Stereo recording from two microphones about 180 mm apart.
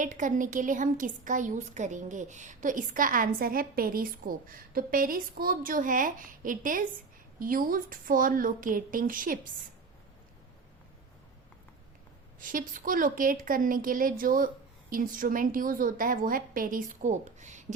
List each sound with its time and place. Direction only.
0.0 s a woman's voice: 45° right (ahead or behind)
12.4 s a woman's voice: 50° right (ahead or behind)